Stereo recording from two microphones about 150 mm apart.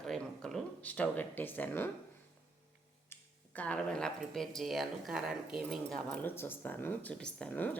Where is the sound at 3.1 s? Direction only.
10° left (ahead or behind).